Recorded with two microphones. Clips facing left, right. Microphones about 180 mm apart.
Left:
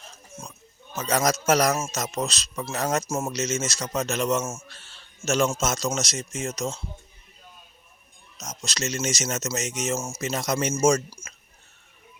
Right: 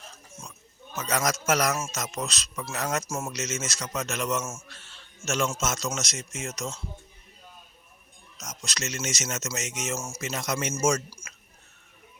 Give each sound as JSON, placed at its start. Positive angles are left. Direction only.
{"t": 0.9, "sound": "a man's voice", "side_deg": 30}
{"t": 8.4, "sound": "speech", "side_deg": 25}